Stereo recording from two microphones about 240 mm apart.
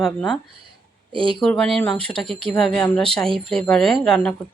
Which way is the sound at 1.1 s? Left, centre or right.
Right.